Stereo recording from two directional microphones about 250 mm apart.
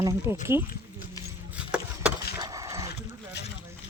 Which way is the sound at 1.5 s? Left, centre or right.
Centre.